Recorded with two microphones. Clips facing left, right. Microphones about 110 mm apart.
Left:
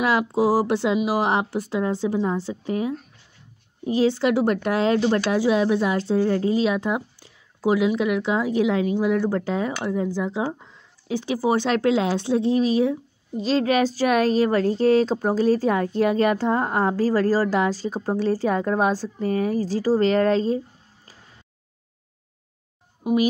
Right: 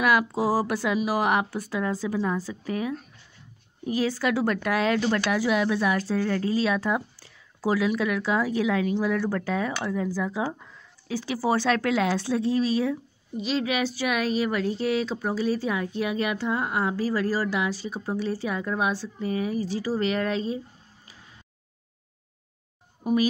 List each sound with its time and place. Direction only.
0.0 s speech: 25° left (ahead or behind)
13.4 s speech: 40° left (ahead or behind)